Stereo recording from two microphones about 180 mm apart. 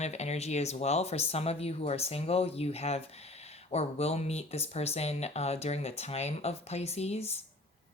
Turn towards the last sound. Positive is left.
turn(degrees=35)  # may be behind; listen again after turning